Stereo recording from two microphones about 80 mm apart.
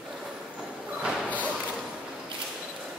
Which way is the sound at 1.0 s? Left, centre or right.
Centre.